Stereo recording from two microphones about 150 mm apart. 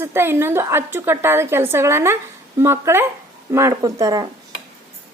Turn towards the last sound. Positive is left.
turn(degrees=-25)  # may be behind; listen again after turning